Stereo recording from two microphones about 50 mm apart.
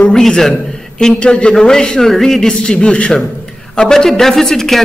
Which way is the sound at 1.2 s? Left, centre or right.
Left.